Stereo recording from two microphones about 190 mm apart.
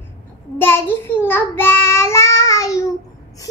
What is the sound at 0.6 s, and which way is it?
Child singing, 10° left (ahead or behind).